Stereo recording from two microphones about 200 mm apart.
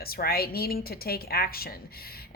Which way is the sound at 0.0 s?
50° left (ahead or behind).